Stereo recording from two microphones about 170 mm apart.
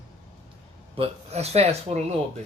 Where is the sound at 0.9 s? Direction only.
35° right (ahead or behind).